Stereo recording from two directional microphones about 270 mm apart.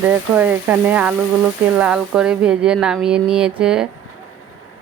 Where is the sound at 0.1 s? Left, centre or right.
Centre.